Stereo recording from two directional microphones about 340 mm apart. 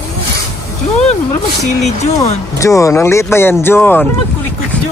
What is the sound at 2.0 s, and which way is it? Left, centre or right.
Speech, centre.